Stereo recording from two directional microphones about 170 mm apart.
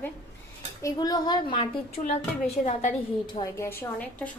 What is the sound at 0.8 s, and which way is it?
Speech, 20° left (ahead or behind).